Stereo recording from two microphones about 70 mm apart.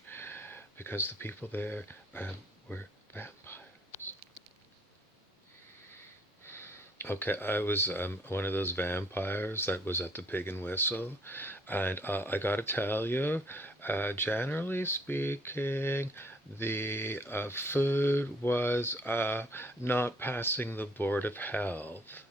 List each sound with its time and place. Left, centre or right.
0.1 s speech: left
6.4 s speech: left